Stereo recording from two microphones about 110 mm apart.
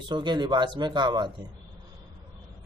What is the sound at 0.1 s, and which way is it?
Speech, 45° right (ahead or behind).